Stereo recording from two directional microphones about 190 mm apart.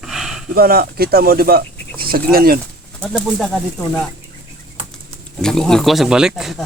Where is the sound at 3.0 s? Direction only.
5° left (ahead or behind).